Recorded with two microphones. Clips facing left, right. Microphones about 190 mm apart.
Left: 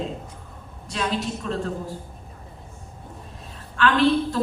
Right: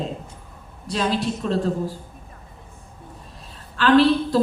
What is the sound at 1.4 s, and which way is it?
Speech, 35° right (ahead or behind).